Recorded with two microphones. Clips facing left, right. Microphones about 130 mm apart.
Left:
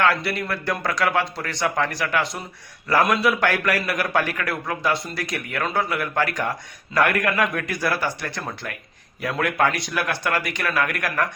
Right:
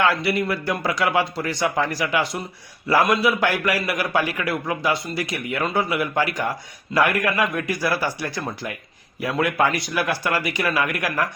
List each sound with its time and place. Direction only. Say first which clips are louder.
0.0 s a man's voice: right 1 dB; 5° right (ahead or behind)